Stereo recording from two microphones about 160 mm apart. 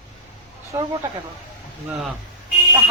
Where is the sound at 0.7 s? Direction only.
20° right (ahead or behind).